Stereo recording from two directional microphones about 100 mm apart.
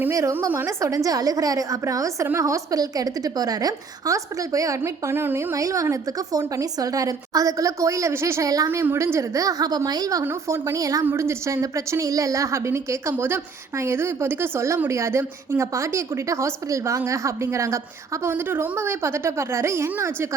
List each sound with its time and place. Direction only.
0.1 s a woman's voice: 30° right (ahead or behind)
4.8 s a woman's voice: 20° right (ahead or behind)
8.8 s a woman's voice: 25° right (ahead or behind)
10.2 s a woman's voice: 25° right (ahead or behind)